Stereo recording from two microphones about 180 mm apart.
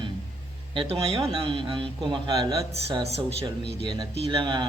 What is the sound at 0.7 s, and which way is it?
Speech, 30° right (ahead or behind).